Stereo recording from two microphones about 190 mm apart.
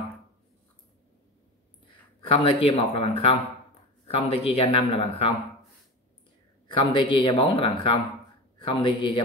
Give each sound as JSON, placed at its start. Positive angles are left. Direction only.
{"t": 1.9, "sound": "speech", "side_deg": 25}
{"t": 6.7, "sound": "speech", "side_deg": 25}